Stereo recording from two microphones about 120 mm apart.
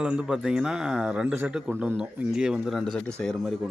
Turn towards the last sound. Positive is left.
turn(degrees=5)  # may be behind; listen again after turning